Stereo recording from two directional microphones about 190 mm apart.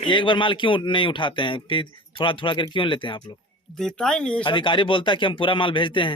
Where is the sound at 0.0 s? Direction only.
25° left (ahead or behind).